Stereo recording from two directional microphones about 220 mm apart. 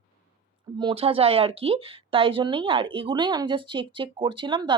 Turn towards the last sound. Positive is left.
turn(degrees=-20)  # may be behind; listen again after turning